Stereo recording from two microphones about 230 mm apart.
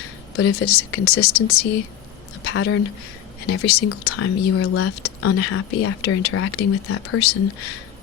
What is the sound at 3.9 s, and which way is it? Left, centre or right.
Speech, left.